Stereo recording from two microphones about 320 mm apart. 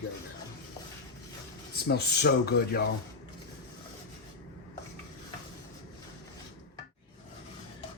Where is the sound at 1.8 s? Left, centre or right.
Left.